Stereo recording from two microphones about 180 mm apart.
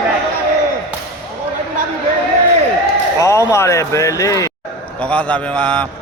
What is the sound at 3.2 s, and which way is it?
Speech, 15° left (ahead or behind).